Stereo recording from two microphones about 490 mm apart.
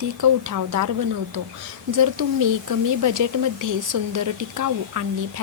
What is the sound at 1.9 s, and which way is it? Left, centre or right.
Speech, right.